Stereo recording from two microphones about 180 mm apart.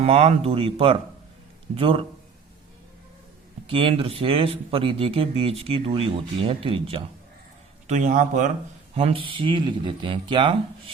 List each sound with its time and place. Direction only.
0.0 s speech: 35° right (ahead or behind)
3.7 s speech: 30° right (ahead or behind)
7.9 s a man's voice: 45° right (ahead or behind)
9.0 s speech: 30° right (ahead or behind)